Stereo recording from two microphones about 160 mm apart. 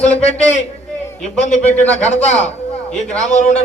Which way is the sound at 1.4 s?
45° left (ahead or behind).